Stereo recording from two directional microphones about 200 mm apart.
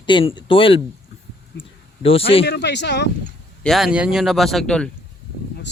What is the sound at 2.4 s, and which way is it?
Speech, 55° left (ahead or behind).